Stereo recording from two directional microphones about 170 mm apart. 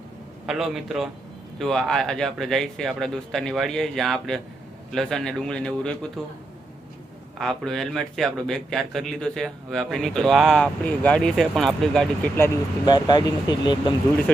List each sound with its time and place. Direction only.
0.4 s speech: centre (ahead or behind)
7.3 s speech: centre (ahead or behind)
12.8 s speech: 25° left (ahead or behind)